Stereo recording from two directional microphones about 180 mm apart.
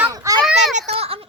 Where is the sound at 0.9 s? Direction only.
35° right (ahead or behind).